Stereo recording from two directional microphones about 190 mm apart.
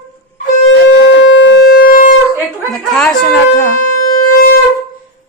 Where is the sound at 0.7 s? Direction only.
70° left (ahead or behind); by 2.1 s 50° left (ahead or behind).